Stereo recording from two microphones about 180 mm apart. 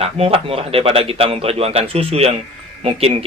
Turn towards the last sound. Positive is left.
turn(degrees=-35)  # may be behind; listen again after turning